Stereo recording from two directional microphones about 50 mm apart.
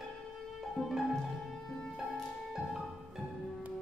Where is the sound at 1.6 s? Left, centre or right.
Centre.